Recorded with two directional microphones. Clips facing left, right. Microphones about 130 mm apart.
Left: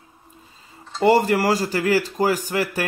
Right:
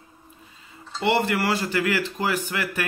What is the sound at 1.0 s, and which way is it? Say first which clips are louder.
Speech: left 6 dB; 40° left (ahead or behind).